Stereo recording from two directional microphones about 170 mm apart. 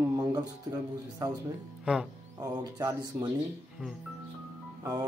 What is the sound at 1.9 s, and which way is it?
Speech, 5° right (ahead or behind).